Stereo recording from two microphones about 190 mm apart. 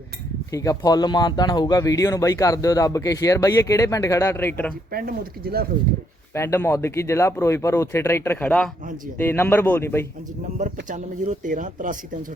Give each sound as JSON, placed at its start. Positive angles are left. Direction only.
{"t": 0.5, "sound": "speech", "side_deg": 15}
{"t": 4.9, "sound": "speech", "side_deg": -50}
{"t": 6.3, "sound": "speech", "side_deg": 15}
{"t": 10.8, "sound": "speech", "side_deg": -40}